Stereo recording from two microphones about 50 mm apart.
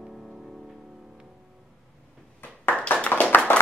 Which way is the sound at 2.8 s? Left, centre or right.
Left.